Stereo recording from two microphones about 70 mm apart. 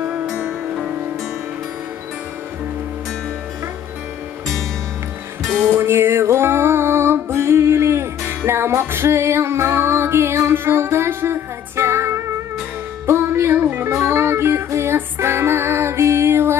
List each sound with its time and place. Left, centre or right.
0.1 s music: centre
5.8 s music: right